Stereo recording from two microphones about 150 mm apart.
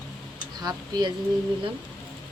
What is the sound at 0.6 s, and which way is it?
Speech, 25° right (ahead or behind).